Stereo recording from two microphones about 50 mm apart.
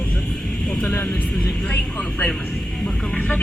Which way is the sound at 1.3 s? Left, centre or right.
Centre.